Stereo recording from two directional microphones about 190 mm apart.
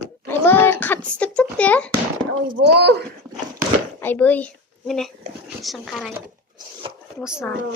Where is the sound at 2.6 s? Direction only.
60° right (ahead or behind).